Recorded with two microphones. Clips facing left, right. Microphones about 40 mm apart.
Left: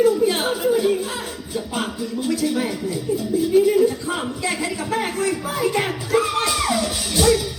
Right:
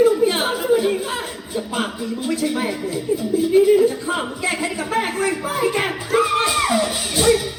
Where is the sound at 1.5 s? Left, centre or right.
Centre.